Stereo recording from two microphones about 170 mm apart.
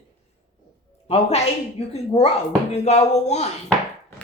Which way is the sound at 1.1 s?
35° left (ahead or behind).